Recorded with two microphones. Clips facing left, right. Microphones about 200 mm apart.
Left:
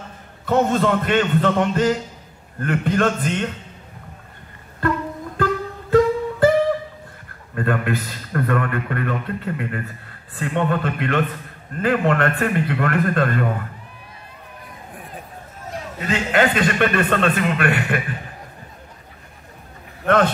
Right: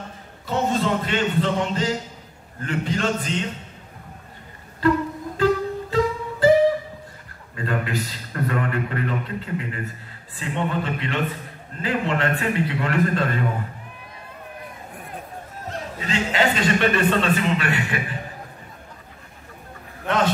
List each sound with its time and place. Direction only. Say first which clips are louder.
0.5 s a man's voice: left 4 dB; 55° left (ahead or behind)
4.8 s a man's voice: right 3 dB; 55° left (ahead or behind)
5.4 s music: right 3 dB; 55° left (ahead or behind)
7.5 s a man's voice: left 4 dB; 55° left (ahead or behind)
16.1 s a man's voice: left 3 dB; 55° left (ahead or behind)